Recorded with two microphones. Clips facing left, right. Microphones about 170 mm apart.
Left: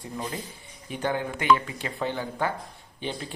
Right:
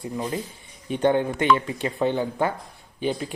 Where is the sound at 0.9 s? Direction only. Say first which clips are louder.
Right 8 dB; 25° right (ahead or behind).